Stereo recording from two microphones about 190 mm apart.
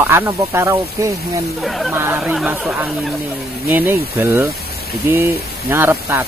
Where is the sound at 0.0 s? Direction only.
10° right (ahead or behind).